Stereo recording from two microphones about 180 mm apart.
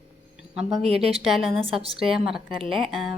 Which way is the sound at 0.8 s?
35° right (ahead or behind).